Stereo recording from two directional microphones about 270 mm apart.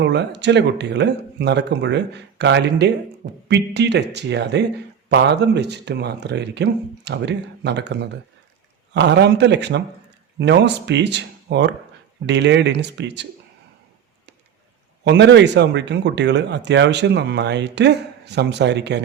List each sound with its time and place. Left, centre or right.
0.0 s speech: right
15.0 s speech: right